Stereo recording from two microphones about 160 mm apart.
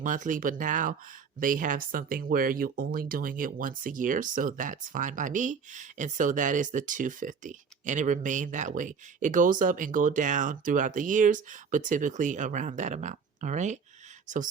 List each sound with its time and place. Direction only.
0.0 s speech: 55° right (ahead or behind)